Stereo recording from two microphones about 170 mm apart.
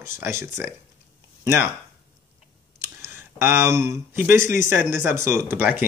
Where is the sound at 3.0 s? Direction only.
15° right (ahead or behind).